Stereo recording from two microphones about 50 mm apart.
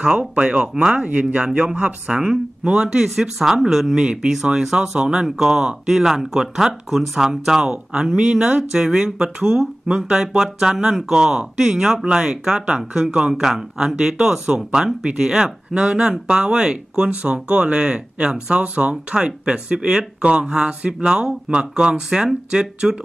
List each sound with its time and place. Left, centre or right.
0.0 s speech: centre
1.5 s speech: centre